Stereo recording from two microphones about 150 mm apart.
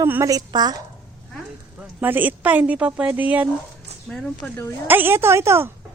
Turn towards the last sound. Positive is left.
turn(degrees=-15)  # may be behind; listen again after turning